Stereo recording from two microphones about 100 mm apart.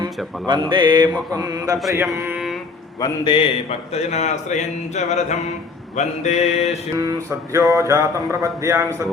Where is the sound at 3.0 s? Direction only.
50° left (ahead or behind).